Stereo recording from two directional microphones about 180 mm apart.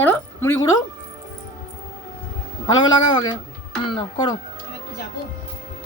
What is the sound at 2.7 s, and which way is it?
A man's voice, 25° left (ahead or behind).